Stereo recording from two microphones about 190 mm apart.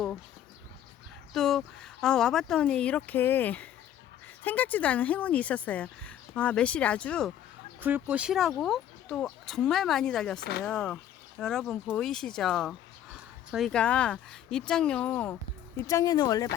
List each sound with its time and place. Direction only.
1.3 s speech: centre (ahead or behind)
7.8 s speech: 10° right (ahead or behind); by 15.4 s 10° left (ahead or behind)
15.9 s speech: 20° left (ahead or behind)